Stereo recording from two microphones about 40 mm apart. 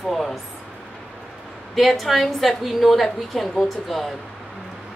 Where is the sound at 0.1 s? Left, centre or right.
Centre.